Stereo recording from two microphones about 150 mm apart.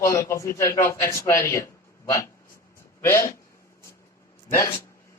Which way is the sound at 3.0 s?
20° left (ahead or behind).